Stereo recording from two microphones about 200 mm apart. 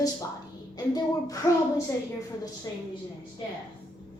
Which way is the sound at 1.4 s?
20° left (ahead or behind).